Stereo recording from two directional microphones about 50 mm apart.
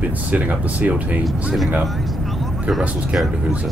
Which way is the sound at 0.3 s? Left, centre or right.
Right.